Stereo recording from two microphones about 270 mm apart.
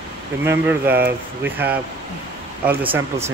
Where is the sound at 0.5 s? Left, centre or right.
Centre.